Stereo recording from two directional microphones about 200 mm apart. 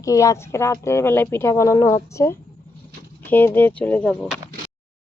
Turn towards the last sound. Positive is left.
turn(degrees=5)  # may be behind; listen again after turning